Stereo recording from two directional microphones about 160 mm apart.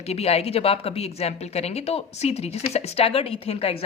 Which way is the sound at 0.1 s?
40° left (ahead or behind).